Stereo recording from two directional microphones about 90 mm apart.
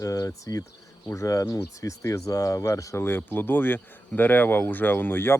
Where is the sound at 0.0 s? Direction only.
40° left (ahead or behind).